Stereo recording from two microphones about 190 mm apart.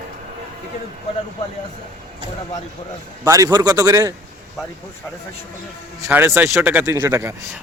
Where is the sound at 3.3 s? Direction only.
20° right (ahead or behind).